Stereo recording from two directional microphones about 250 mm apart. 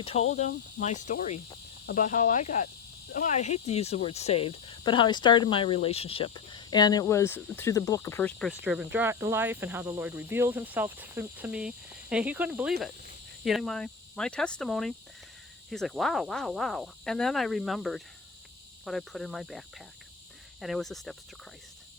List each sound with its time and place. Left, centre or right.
0.0 s speech: left; by 21.2 s centre